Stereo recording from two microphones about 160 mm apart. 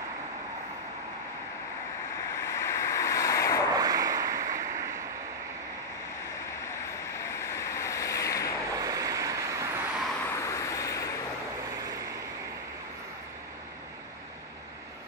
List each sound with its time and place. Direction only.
2.5 s waves: 20° left (ahead or behind)
3.7 s waves: 20° right (ahead or behind)
7.3 s waves: 20° left (ahead or behind)
8.7 s vehicle: 20° right (ahead or behind)
10.3 s vehicle: 20° left (ahead or behind)
11.8 s vehicle: 20° right (ahead or behind)